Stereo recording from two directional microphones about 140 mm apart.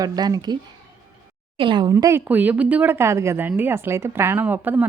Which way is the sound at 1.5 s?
35° right (ahead or behind).